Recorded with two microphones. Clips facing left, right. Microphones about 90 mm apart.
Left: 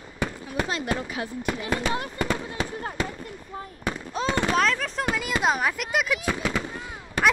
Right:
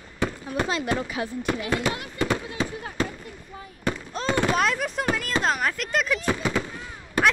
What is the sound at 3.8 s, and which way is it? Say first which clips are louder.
Speech: right 1 dB; 5° left (ahead or behind).